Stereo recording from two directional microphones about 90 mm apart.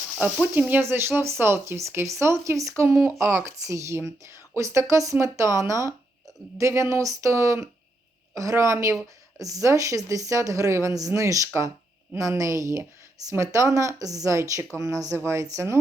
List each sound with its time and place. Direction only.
0.2 s speech: 15° right (ahead or behind)
0.7 s speech: 25° right (ahead or behind)